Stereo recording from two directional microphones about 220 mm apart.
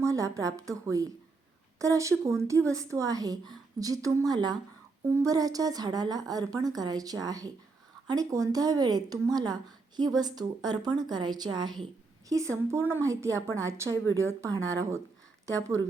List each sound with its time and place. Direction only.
0.0 s speech: 15° right (ahead or behind)